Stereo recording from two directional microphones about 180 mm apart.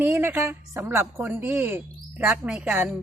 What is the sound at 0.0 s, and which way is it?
A woman's voice, 10° right (ahead or behind).